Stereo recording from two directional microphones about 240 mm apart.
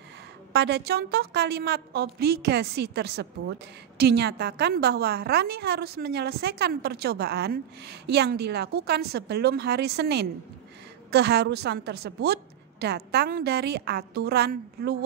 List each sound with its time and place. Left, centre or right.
0.5 s a woman's voice: right